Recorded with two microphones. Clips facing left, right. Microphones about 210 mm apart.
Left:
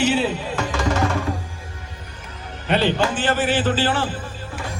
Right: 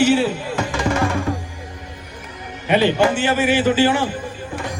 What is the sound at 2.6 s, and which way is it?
A man's voice, 10° right (ahead or behind).